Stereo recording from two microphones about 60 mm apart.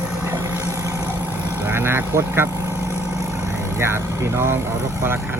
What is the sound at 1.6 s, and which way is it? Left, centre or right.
Speech, right.